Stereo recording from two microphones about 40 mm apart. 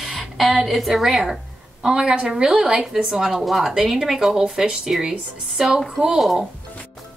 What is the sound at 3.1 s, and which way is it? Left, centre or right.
A woman's voice, centre.